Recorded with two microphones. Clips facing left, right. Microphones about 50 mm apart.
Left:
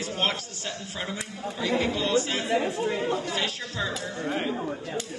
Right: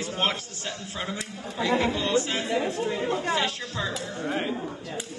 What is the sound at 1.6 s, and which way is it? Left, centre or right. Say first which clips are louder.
Speech: right 2 dB; right.